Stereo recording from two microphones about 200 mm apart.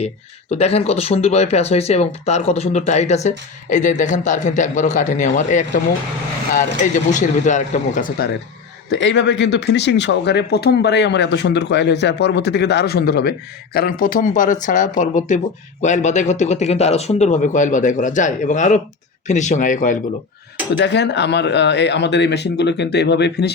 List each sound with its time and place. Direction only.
0.5 s speech: 30° left (ahead or behind)
6.9 s speech: 40° left (ahead or behind)
8.9 s speech: 60° left (ahead or behind); by 20.0 s 40° left (ahead or behind)
20.7 s speech: 60° left (ahead or behind)